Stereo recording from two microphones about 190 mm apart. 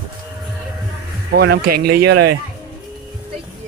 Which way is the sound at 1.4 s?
55° right (ahead or behind).